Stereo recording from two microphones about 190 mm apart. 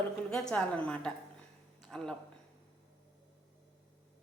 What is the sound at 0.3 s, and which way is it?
A woman's voice, 5° left (ahead or behind).